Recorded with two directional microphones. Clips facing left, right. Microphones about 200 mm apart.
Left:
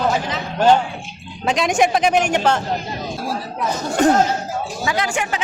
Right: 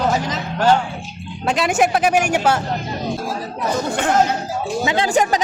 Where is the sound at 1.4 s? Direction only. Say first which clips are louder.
Even; 5° right (ahead or behind).